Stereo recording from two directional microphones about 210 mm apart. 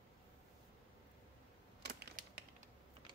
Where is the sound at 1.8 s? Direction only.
50° right (ahead or behind).